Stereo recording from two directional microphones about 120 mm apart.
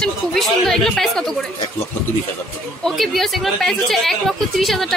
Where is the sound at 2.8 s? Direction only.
5° left (ahead or behind).